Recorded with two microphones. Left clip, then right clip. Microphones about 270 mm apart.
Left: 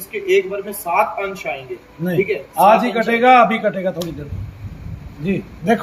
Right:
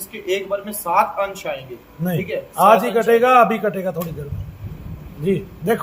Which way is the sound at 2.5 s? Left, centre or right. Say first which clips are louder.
Left 1 dB; centre.